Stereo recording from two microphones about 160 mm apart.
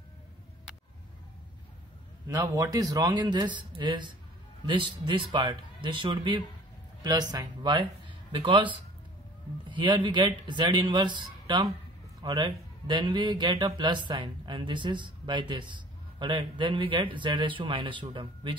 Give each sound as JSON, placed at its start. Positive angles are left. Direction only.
{"t": 2.2, "sound": "a man's voice", "side_deg": -20}
{"t": 9.7, "sound": "a man's voice", "side_deg": -30}